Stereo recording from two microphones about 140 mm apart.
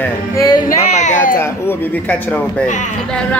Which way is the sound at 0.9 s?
55° left (ahead or behind).